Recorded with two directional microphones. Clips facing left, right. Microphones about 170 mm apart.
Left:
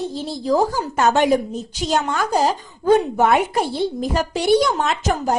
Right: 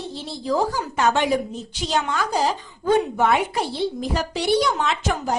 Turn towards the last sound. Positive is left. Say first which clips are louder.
# left 3 dB
turn(degrees=45)  # may be behind; listen again after turning